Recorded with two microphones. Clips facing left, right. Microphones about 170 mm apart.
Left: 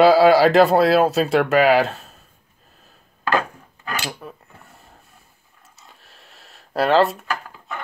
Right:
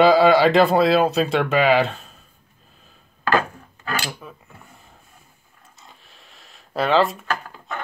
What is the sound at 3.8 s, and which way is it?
Dishes, 20° left (ahead or behind).